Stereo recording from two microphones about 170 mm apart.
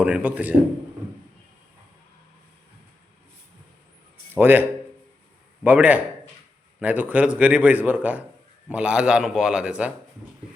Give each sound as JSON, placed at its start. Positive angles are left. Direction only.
{"t": 0.0, "sound": "a man's voice", "side_deg": -10}
{"t": 4.4, "sound": "a man's voice", "side_deg": -10}
{"t": 5.6, "sound": "a man's voice", "side_deg": -10}